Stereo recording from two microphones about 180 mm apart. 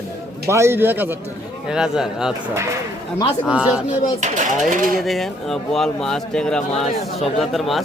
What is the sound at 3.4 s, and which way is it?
Speech, 5° right (ahead or behind).